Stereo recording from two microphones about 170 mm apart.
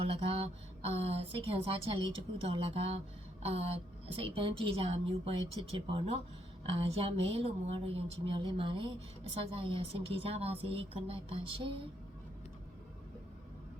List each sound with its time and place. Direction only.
0.1 s a woman's voice: 35° right (ahead or behind)